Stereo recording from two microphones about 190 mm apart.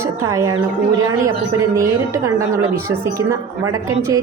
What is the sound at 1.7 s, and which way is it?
A woman's voice, 15° right (ahead or behind).